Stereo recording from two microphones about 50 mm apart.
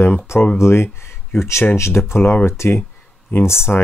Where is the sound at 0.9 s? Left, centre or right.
Left.